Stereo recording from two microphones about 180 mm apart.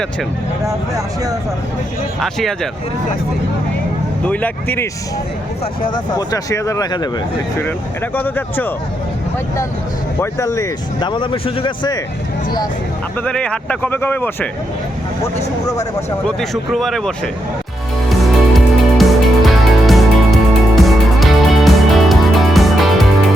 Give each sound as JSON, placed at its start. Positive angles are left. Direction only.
{"t": 0.6, "sound": "speech", "side_deg": -20}
{"t": 2.2, "sound": "speech", "side_deg": 0}
{"t": 4.3, "sound": "speech", "side_deg": 10}
{"t": 5.8, "sound": "speech", "side_deg": 25}
{"t": 8.1, "sound": "speech", "side_deg": 10}
{"t": 10.2, "sound": "speech", "side_deg": 15}
{"t": 13.2, "sound": "speech", "side_deg": 5}
{"t": 15.4, "sound": "speech", "side_deg": 35}
{"t": 16.2, "sound": "speech", "side_deg": 0}
{"t": 18.2, "sound": "music", "side_deg": 0}